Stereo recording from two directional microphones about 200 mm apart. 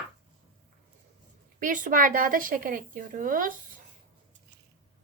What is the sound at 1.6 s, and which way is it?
Speech, 40° right (ahead or behind).